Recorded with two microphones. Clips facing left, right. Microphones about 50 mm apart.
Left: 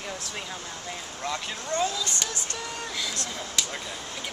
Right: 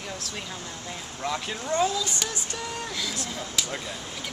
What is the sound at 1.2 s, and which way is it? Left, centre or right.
Speech, centre.